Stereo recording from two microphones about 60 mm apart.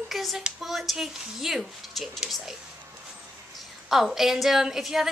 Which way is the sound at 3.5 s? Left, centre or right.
Centre.